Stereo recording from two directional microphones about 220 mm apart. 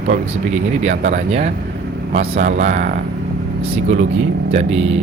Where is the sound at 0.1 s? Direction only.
30° right (ahead or behind).